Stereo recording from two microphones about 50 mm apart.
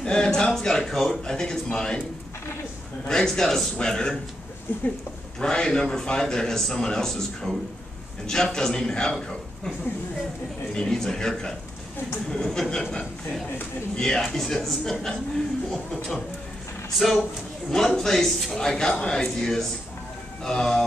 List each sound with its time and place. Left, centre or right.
0.0 s a man's voice: centre
3.1 s a man's voice: centre
4.7 s speech: left
5.4 s a man's voice: centre
10.7 s a man's voice: centre
13.9 s a man's voice: centre
17.6 s a man's voice: centre
18.5 s a man's voice: centre